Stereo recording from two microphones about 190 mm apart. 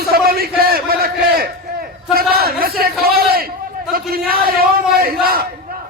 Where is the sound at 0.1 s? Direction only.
55° right (ahead or behind).